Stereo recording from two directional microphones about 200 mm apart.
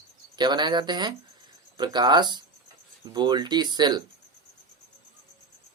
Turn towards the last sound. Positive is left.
turn(degrees=-20)  # may be behind; listen again after turning